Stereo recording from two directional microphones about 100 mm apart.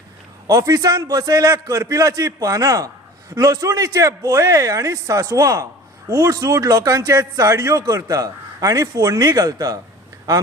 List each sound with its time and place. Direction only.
0.4 s a man's voice: 35° right (ahead or behind)